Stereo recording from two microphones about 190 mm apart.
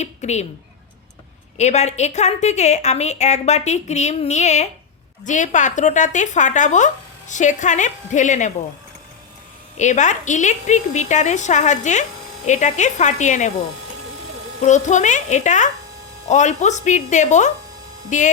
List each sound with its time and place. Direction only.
0.0 s speech: 35° left (ahead or behind)
1.5 s a woman's voice: 35° left (ahead or behind)
9.7 s a woman's voice: 40° left (ahead or behind)
14.6 s a woman's voice: 40° left (ahead or behind)